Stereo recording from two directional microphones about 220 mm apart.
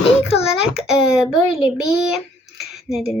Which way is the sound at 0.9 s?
5° right (ahead or behind).